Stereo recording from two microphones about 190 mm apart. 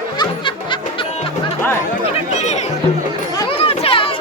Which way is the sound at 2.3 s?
35° left (ahead or behind).